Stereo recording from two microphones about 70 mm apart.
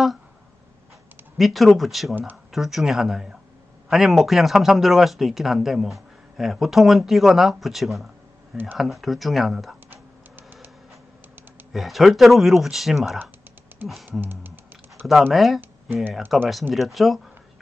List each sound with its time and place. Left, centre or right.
1.4 s speech: centre
11.7 s speech: centre
13.8 s music: right
14.2 s typing: right
15.3 s speech: centre